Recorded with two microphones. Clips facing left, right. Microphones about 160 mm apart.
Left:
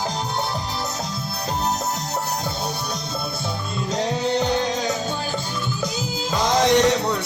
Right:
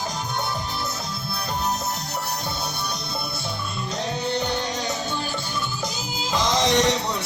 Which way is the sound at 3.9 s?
90° left.